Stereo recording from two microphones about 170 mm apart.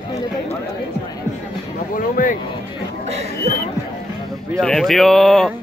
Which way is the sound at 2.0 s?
50° left (ahead or behind).